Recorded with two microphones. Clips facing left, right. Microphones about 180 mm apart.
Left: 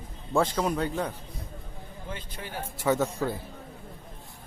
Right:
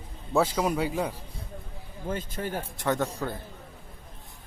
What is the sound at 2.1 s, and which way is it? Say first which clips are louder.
Speech: right 7 dB; 45° right (ahead or behind).